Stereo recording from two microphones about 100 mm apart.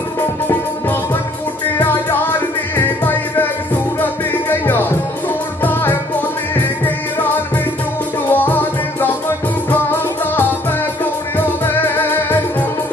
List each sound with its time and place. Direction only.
1.8 s music: 20° left (ahead or behind)
8.3 s music: 20° left (ahead or behind)
11.3 s music: 20° left (ahead or behind)